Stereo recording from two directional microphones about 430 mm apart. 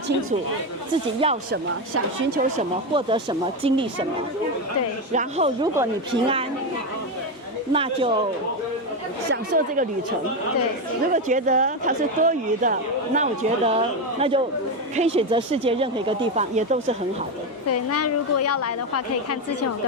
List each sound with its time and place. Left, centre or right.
1.2 s a woman's voice: centre
1.9 s a woman's voice: right
5.1 s a woman's voice: centre
7.7 s a woman's voice: centre
9.3 s speech: right
11.1 s a woman's voice: centre
17.7 s a woman's voice: left